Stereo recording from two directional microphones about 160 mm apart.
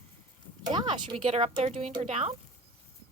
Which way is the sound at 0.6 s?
25° right (ahead or behind).